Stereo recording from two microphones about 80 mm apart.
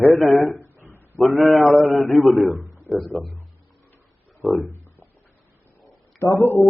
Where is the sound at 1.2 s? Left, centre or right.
Centre.